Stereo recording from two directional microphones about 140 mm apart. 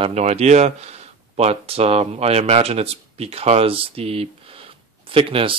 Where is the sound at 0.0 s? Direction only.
50° right (ahead or behind).